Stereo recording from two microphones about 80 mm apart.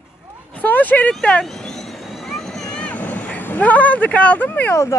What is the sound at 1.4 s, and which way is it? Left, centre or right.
Vehicle, centre.